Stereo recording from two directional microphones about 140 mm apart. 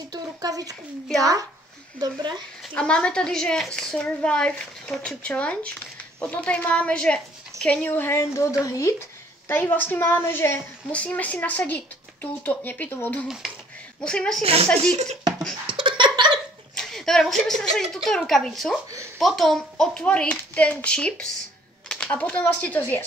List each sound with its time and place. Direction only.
0.1 s a woman's voice: 25° right (ahead or behind)
2.7 s a woman's voice: 5° left (ahead or behind)
14.4 s speech: 45° right (ahead or behind)
15.6 s laughter: 35° right (ahead or behind)
16.7 s a sound: 5° left (ahead or behind)
17.9 s speech: 5° left (ahead or behind)